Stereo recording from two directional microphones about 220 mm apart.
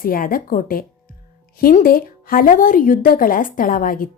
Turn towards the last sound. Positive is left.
turn(degrees=40)  # may be behind; listen again after turning